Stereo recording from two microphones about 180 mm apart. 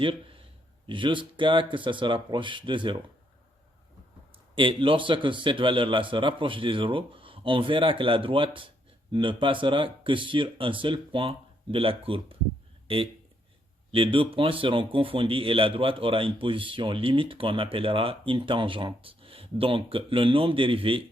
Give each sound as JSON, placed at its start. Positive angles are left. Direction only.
{"t": 0.0, "sound": "a man's voice", "side_deg": -30}
{"t": 4.5, "sound": "speech", "side_deg": -30}